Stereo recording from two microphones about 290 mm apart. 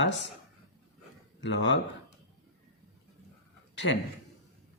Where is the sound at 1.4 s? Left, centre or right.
Left.